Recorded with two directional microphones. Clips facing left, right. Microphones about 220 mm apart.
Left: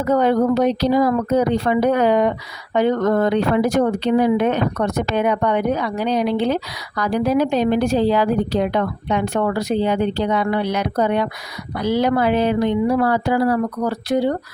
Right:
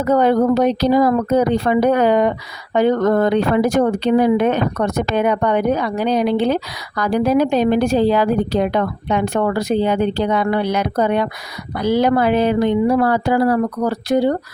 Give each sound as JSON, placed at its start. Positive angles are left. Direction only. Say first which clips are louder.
{"t": 0.1, "sound": "speech", "louder": "right 2 dB", "side_deg": -50}